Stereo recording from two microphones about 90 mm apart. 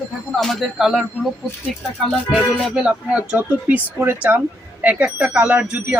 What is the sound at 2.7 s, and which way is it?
Speech, 5° right (ahead or behind).